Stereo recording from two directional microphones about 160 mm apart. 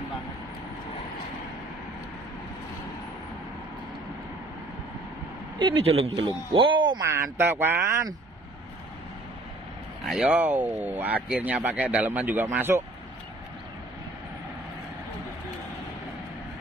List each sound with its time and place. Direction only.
5.6 s speech: 35° right (ahead or behind); by 8.1 s 15° right (ahead or behind)
10.0 s speech: 5° right (ahead or behind)